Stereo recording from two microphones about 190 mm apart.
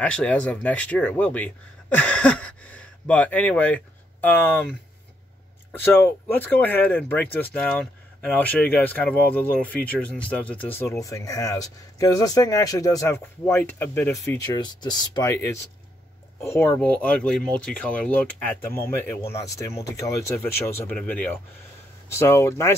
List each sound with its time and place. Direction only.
0.0 s speech: 5° left (ahead or behind)
6.0 s speech: 10° left (ahead or behind)